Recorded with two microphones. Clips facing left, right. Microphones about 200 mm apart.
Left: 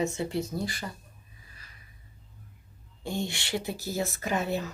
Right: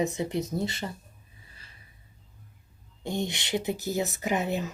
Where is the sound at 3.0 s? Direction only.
20° right (ahead or behind).